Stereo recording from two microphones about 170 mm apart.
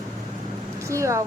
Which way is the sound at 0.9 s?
15° right (ahead or behind).